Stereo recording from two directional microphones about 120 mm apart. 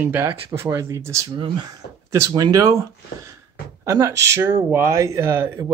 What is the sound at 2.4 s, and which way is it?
Speech, 30° right (ahead or behind).